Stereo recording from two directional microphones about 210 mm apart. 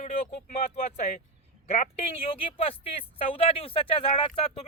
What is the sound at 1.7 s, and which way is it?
Speech, 25° left (ahead or behind).